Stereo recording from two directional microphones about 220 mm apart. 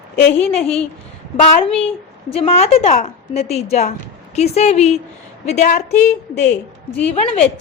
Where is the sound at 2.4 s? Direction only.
30° left (ahead or behind).